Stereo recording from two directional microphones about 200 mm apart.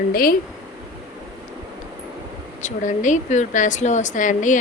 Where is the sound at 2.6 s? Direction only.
40° left (ahead or behind).